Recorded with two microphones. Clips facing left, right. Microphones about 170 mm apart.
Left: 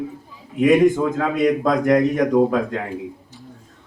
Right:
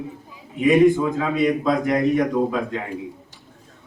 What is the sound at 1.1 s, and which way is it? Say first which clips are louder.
A man's voice: left 2 dB; 45° left (ahead or behind).